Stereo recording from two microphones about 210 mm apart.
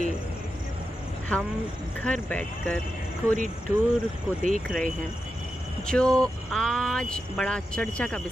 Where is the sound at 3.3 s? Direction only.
40° right (ahead or behind).